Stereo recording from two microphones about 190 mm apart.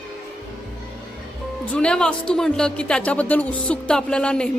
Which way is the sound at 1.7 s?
5° left (ahead or behind).